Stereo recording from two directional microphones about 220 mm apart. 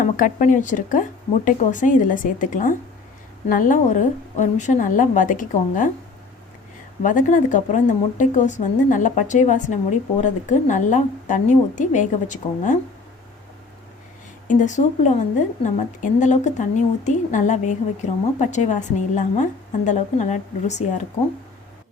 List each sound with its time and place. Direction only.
0.0 s a woman's voice: 35° left (ahead or behind)
7.0 s a woman's voice: 35° left (ahead or behind)
14.4 s a woman's voice: 35° left (ahead or behind)